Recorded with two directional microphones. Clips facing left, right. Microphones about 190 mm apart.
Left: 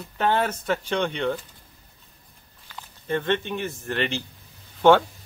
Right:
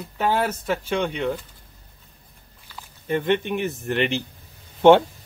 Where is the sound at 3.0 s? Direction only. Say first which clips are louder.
Right 3 dB; 15° right (ahead or behind).